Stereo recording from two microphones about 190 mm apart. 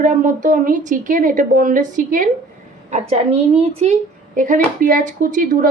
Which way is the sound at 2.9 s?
35° right (ahead or behind).